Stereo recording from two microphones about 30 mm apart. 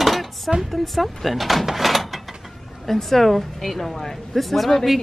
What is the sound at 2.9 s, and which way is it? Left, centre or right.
A woman's voice, centre.